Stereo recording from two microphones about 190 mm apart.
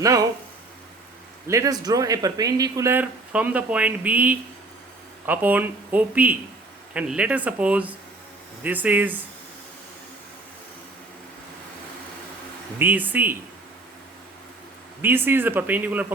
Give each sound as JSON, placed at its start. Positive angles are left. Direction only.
{"t": 0.0, "sound": "speech", "side_deg": -20}
{"t": 1.5, "sound": "speech", "side_deg": -15}
{"t": 12.8, "sound": "speech", "side_deg": -10}
{"t": 15.0, "sound": "speech", "side_deg": -10}